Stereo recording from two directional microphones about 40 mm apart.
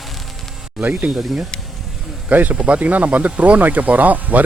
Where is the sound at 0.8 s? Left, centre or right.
Right.